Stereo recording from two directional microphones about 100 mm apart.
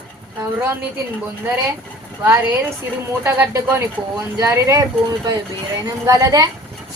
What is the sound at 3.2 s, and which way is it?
A woman's voice, 25° right (ahead or behind).